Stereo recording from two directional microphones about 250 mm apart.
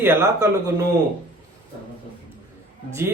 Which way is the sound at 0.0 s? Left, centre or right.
Centre.